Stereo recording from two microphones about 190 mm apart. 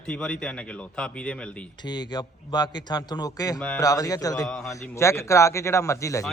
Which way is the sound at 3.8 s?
20° left (ahead or behind).